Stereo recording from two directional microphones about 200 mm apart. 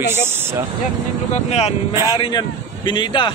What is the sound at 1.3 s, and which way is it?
Speech, 30° left (ahead or behind).